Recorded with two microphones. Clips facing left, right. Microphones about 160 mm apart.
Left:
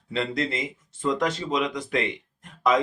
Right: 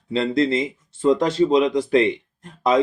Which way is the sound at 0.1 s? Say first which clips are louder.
Right 8 dB; 30° right (ahead or behind).